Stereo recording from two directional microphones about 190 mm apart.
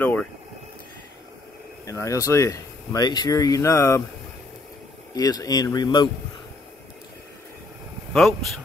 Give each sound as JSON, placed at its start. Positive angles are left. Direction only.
{"t": 0.0, "sound": "a sound", "side_deg": 10}
{"t": 1.9, "sound": "speech", "side_deg": 15}
{"t": 5.1, "sound": "speech", "side_deg": 20}
{"t": 8.1, "sound": "speech", "side_deg": 5}